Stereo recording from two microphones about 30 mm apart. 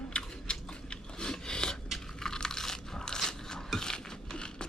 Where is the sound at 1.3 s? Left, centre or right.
Left.